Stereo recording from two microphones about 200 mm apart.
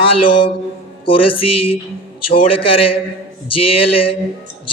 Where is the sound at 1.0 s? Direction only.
25° left (ahead or behind).